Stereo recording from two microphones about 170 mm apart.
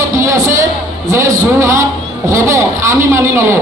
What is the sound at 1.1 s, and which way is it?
A man's voice, 20° right (ahead or behind).